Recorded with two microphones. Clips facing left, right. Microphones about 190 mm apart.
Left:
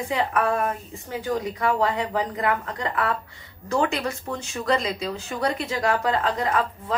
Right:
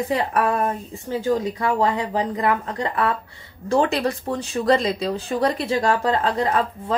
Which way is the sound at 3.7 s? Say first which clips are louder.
Right 4 dB; 35° right (ahead or behind).